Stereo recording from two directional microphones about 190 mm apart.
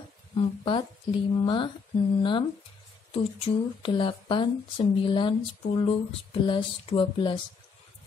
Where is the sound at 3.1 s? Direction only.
30° left (ahead or behind).